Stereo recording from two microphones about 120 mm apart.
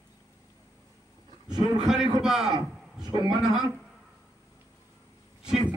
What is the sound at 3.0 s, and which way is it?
Speech, 40° right (ahead or behind).